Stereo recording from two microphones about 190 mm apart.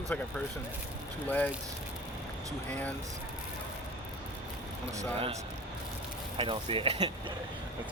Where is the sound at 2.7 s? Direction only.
5° left (ahead or behind).